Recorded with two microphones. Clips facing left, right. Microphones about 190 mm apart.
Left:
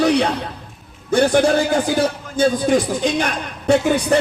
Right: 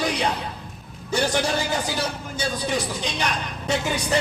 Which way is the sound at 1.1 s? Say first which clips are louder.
Left 9 dB; 55° left (ahead or behind).